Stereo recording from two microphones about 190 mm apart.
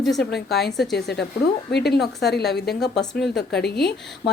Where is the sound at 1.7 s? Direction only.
60° left (ahead or behind).